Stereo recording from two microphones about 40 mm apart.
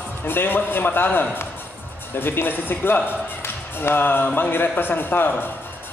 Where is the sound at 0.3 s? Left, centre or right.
Left.